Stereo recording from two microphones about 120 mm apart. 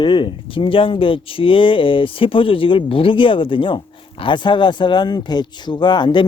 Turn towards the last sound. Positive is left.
turn(degrees=40)  # may be behind; listen again after turning